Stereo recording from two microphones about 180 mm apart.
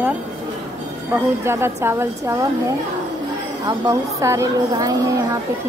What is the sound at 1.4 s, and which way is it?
Speech, 15° right (ahead or behind).